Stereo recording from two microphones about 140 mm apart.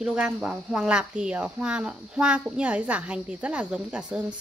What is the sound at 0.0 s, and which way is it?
Speech, 5° right (ahead or behind).